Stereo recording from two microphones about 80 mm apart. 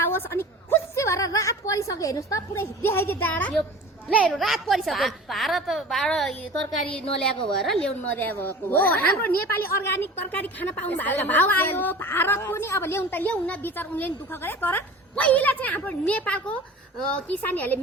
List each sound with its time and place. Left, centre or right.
0.0 s a sound: left
4.3 s a woman's voice: centre
8.1 s a woman's voice: left